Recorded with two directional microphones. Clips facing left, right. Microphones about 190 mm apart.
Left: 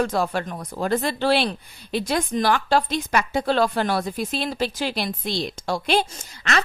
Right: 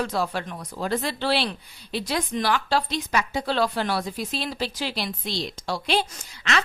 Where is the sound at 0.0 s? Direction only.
50° left (ahead or behind).